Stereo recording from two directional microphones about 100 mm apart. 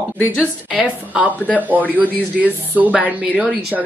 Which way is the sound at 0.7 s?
15° right (ahead or behind).